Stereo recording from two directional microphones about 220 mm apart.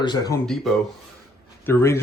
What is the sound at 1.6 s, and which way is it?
Speech, 10° left (ahead or behind).